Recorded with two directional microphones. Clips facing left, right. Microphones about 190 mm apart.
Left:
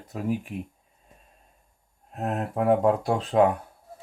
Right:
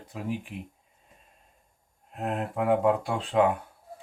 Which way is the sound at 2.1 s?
40° left (ahead or behind).